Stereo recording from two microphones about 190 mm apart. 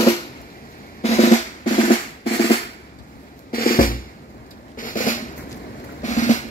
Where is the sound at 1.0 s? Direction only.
35° left (ahead or behind).